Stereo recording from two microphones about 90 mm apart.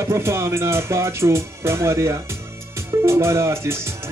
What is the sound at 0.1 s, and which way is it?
Speech, 30° right (ahead or behind).